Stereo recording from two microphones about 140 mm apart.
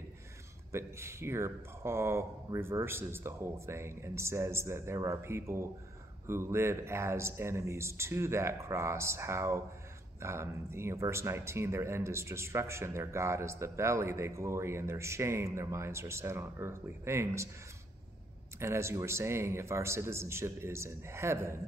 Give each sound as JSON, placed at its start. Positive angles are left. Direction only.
{"t": 0.7, "sound": "speech", "side_deg": -20}
{"t": 18.6, "sound": "speech", "side_deg": -20}